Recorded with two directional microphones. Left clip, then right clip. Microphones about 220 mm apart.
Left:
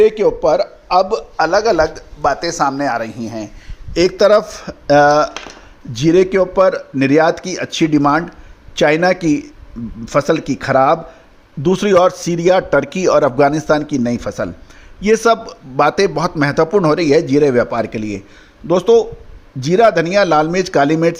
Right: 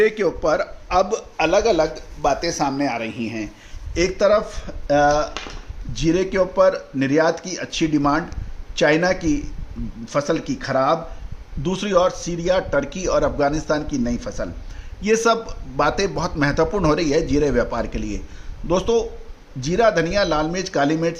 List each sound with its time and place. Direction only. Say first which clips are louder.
0.0 s a man's voice: left 7 dB; 20° left (ahead or behind)
3.9 s a man's voice: left 6 dB; 40° left (ahead or behind)